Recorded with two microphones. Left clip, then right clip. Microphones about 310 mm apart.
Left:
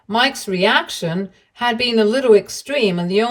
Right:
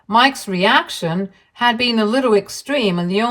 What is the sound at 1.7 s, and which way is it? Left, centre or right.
Speech, centre.